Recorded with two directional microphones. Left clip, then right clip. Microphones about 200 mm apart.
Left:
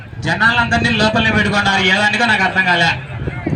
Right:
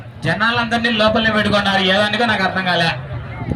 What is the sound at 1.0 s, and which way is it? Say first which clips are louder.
Speech: right 3 dB; 20° right (ahead or behind).